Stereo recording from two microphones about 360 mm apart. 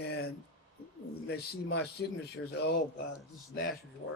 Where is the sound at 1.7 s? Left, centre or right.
Left.